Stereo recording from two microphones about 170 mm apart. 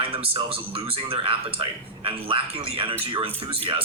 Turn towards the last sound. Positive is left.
turn(degrees=-30)  # may be behind; listen again after turning